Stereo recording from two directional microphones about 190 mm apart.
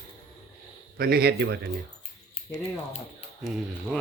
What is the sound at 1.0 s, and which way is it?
Speech, 50° right (ahead or behind).